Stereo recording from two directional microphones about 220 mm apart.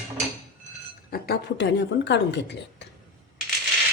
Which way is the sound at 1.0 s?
45° left (ahead or behind).